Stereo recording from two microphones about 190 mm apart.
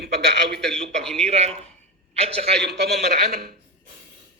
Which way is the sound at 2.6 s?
60° right (ahead or behind).